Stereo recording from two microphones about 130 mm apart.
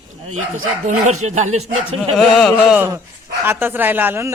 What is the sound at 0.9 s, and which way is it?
Speech, 65° right (ahead or behind).